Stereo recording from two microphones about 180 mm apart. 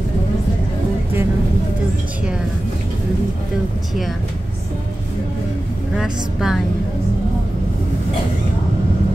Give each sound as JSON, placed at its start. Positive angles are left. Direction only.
{"t": 5.9, "sound": "a woman's voice", "side_deg": -5}